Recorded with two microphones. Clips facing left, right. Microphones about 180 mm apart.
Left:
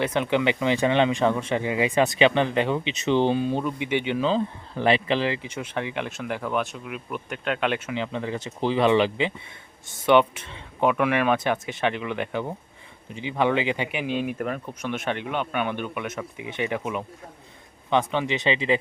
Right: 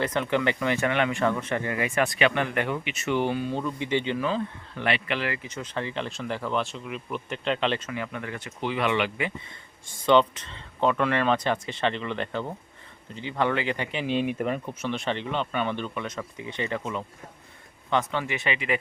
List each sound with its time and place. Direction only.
0.2 s speech: 20° left (ahead or behind)
5.5 s speech: 10° left (ahead or behind)
7.9 s speech: 25° left (ahead or behind)
10.1 s speech: 15° left (ahead or behind)
14.2 s speech: centre (ahead or behind); by 18.8 s 25° left (ahead or behind)